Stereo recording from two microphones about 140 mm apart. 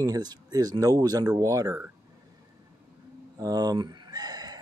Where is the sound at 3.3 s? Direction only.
30° right (ahead or behind).